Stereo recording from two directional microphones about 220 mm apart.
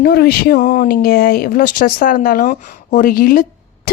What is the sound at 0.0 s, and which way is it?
A woman's voice, 45° left (ahead or behind).